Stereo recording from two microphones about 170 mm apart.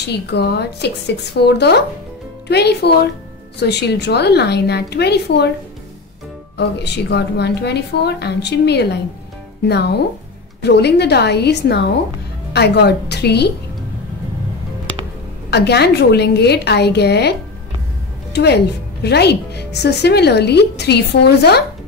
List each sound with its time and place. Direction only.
0.1 s speech: 75° left (ahead or behind)
6.5 s speech: 80° left
15.5 s a woman's voice: 75° left (ahead or behind)